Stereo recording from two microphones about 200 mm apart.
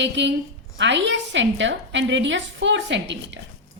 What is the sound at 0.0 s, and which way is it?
A woman's voice, 60° right (ahead or behind).